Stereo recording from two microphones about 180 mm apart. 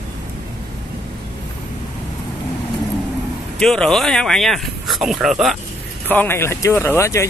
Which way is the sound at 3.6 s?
5° left (ahead or behind).